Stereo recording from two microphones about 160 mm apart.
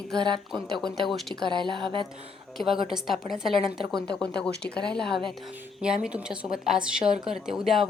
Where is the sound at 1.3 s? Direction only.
30° right (ahead or behind).